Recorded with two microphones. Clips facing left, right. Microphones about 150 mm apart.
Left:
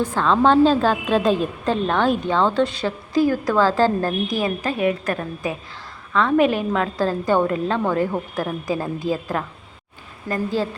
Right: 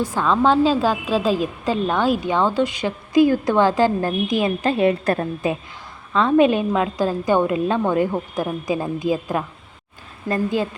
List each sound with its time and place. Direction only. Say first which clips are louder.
0.0 s a woman's voice: left 1 dB; 10° right (ahead or behind)
10.2 s a woman's voice: right 2 dB; 30° right (ahead or behind)